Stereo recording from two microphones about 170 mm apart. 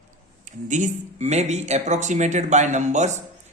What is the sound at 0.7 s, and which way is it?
A man's voice, 45° right (ahead or behind).